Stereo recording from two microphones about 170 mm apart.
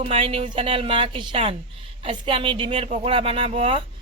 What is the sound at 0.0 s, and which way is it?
Speech, 35° right (ahead or behind).